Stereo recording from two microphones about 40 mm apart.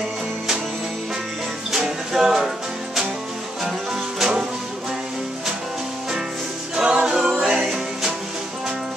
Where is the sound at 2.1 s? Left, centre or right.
Centre.